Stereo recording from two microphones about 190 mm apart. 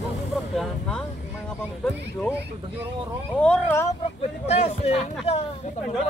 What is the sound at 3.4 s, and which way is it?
Speech, 5° left (ahead or behind).